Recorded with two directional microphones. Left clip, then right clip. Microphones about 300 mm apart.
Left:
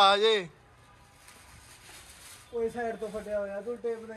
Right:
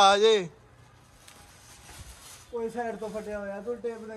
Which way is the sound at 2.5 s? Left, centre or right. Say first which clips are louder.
Left 1 dB; centre.